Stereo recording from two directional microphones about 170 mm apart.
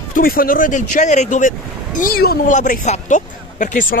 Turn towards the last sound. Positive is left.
turn(degrees=55)  # may be behind; listen again after turning